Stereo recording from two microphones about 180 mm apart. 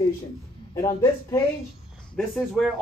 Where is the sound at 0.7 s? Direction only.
20° left (ahead or behind).